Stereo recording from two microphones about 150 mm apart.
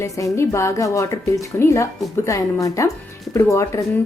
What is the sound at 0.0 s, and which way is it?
A woman's voice, 20° left (ahead or behind).